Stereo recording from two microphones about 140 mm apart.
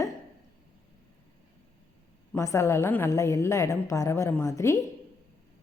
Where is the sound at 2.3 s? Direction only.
20° left (ahead or behind).